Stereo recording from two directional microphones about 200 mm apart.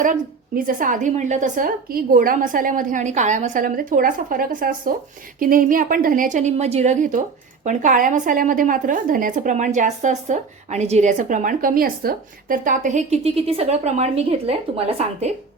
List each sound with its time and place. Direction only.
0.0 s a woman's voice: 40° right (ahead or behind)